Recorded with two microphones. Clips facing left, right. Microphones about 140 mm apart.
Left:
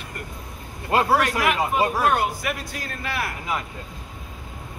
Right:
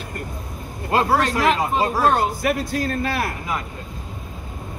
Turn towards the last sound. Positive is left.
turn(degrees=-35)  # may be behind; listen again after turning